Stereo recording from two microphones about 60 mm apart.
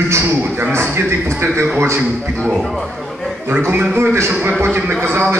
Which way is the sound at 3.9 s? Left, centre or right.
Right.